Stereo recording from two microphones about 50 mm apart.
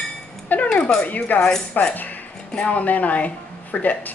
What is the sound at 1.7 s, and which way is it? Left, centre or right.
Dishes, left.